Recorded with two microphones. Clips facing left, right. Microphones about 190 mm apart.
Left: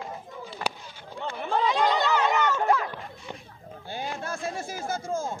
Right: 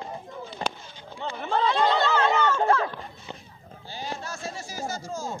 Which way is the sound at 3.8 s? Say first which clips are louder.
Left 2 dB; 55° left (ahead or behind).